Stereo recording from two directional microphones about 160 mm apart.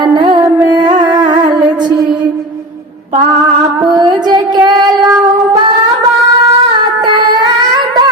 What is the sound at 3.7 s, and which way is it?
Music, 25° right (ahead or behind).